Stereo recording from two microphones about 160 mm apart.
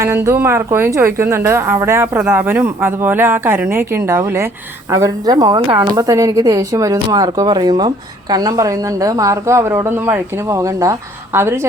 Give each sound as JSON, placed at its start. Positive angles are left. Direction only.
{"t": 0.0, "sound": "a woman's voice", "side_deg": -15}